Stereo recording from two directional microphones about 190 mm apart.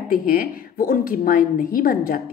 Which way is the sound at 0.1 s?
50° left (ahead or behind).